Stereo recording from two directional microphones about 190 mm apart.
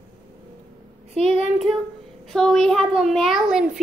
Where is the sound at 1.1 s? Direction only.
30° right (ahead or behind).